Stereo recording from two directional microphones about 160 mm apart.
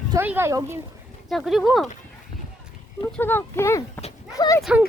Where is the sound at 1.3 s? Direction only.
Centre (ahead or behind).